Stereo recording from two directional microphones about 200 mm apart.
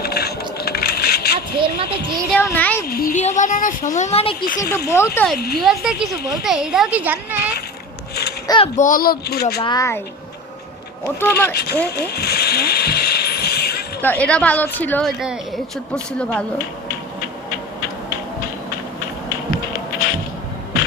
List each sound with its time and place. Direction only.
0.0 s a sound: 55° left (ahead or behind)
1.6 s speech: 25° right (ahead or behind)
2.3 s a child's voice: 10° left (ahead or behind)
2.8 s speech: 50° left (ahead or behind); by 4.4 s 30° left (ahead or behind)
4.4 s speech: 45° left (ahead or behind)
4.9 s a woman's voice: 10° left (ahead or behind)
5.5 s a woman's voice: centre (ahead or behind)
8.4 s a child's voice: 25° left (ahead or behind)
8.7 s speech: 40° left (ahead or behind)
9.6 s a woman's voice: 20° left (ahead or behind)
11.0 s a woman's voice: 15° left (ahead or behind)
11.5 s speech: 55° left (ahead or behind)
11.9 s mechanisms: 55° left (ahead or behind)
14.0 s a woman's voice: 10° left (ahead or behind)